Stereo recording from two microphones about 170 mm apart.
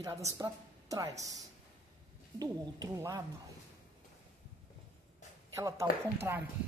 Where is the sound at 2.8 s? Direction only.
20° right (ahead or behind).